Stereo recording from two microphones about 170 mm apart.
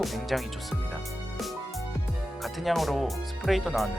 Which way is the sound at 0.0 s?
Centre (ahead or behind).